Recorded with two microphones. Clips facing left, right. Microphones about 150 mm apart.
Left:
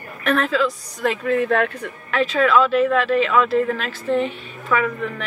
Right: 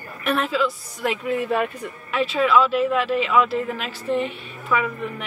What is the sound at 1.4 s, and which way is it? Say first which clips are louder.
Speech: left 3 dB; 80° left.